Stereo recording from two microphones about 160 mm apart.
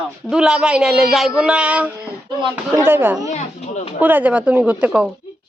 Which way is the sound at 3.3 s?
50° left (ahead or behind).